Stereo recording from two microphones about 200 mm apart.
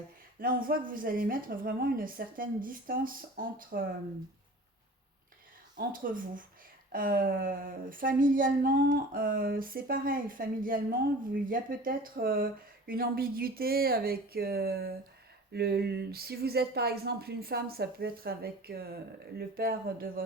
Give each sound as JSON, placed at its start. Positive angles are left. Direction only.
{"t": 0.3, "sound": "speech", "side_deg": -45}
{"t": 5.7, "sound": "speech", "side_deg": -45}